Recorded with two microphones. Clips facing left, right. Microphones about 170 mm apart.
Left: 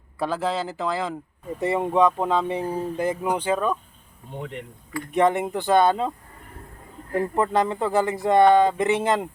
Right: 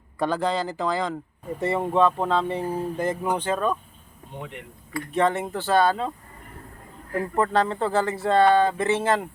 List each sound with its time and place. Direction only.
0.2 s speech: 5° left (ahead or behind)
1.5 s speech: 10° left (ahead or behind)
5.1 s speech: 15° left (ahead or behind)
7.3 s speech: 15° left (ahead or behind)